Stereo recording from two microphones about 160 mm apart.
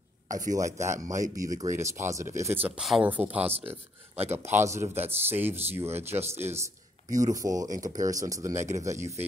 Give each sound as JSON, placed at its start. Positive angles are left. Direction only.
{"t": 0.6, "sound": "speech", "side_deg": -20}
{"t": 3.4, "sound": "speech", "side_deg": -40}
{"t": 4.3, "sound": "speech", "side_deg": -15}